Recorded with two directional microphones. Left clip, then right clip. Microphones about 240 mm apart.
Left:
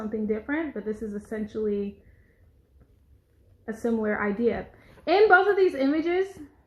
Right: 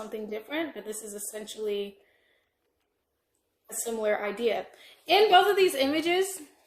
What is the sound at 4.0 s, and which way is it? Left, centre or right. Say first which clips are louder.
Speech: right 1 dB; right.